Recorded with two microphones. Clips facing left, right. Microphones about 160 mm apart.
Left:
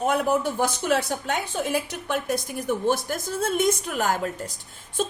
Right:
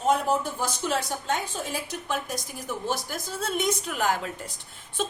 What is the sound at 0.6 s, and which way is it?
A woman's voice, 60° left (ahead or behind).